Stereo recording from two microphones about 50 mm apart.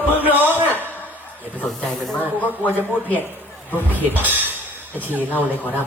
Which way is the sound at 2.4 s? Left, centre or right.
Left.